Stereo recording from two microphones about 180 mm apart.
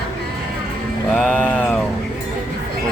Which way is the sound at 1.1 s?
5° left (ahead or behind).